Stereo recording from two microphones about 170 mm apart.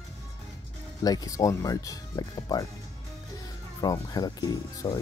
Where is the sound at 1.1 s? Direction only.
20° left (ahead or behind).